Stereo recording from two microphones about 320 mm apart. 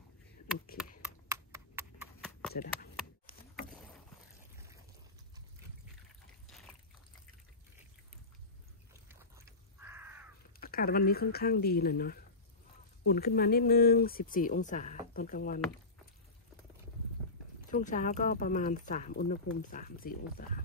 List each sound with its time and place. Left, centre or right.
0.7 s a sound: centre
2.5 s speech: left
9.1 s crow: centre
10.6 s speech: left
17.6 s speech: left